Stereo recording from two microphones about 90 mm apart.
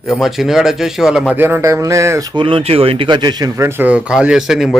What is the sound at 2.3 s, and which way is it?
Speech, 70° right (ahead or behind).